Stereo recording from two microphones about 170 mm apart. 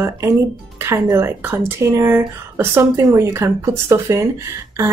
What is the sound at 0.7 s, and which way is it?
Speech, 15° right (ahead or behind).